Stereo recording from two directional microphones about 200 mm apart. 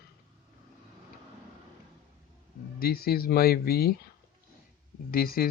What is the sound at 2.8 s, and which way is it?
Speech, 50° left (ahead or behind).